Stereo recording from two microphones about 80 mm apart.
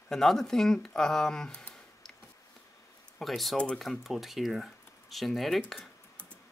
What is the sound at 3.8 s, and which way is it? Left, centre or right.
Speech, centre.